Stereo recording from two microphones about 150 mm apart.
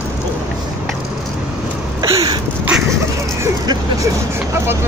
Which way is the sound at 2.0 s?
20° right (ahead or behind).